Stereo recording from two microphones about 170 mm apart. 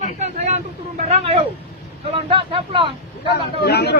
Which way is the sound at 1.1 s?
35° right (ahead or behind).